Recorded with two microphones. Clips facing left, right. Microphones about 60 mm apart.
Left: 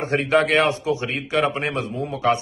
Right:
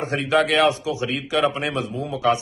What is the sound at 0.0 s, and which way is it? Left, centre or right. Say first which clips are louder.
Speech: left 1 dB; left.